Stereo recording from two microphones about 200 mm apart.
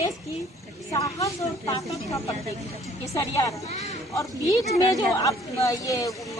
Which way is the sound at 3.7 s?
35° left (ahead or behind).